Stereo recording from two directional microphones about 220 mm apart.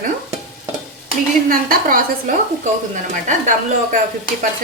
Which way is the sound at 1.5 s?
40° right (ahead or behind).